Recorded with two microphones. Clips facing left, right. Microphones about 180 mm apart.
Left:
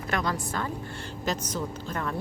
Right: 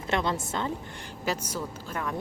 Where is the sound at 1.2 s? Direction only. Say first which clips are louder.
Left 1 dB; 10° right (ahead or behind).